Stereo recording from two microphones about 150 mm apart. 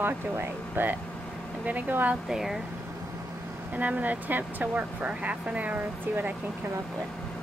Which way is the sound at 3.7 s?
10° right (ahead or behind).